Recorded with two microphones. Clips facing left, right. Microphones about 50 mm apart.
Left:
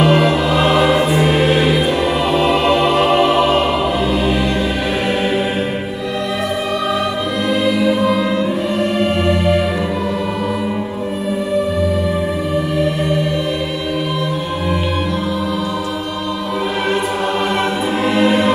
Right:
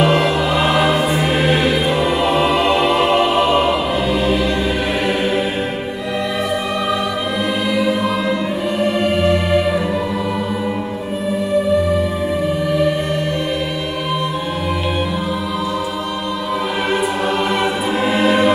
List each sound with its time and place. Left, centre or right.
0.0 s music: centre
8.0 s music: centre
18.0 s music: centre